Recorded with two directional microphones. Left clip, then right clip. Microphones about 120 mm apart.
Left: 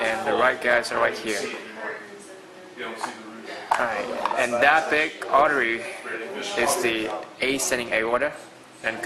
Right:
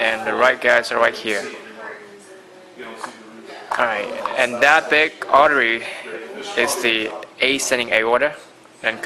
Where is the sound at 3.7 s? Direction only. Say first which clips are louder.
Right 10 dB; 30° right (ahead or behind).